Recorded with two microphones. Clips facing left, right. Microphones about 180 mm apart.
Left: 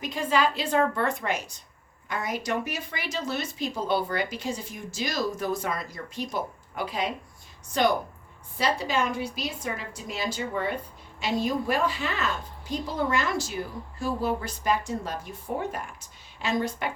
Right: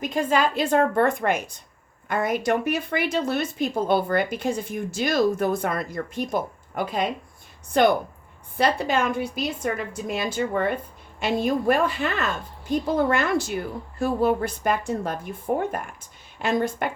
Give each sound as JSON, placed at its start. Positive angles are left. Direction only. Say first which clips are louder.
{"t": 0.0, "sound": "a woman's voice", "louder": "right 3 dB", "side_deg": -50}